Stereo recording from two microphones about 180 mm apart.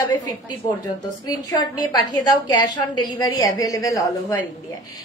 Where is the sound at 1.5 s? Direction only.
20° left (ahead or behind).